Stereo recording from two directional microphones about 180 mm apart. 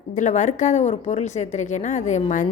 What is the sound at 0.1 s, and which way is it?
Speech, 40° left (ahead or behind).